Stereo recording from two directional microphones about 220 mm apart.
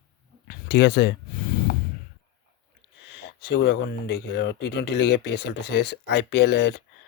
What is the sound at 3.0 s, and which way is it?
Speech, 50° left (ahead or behind).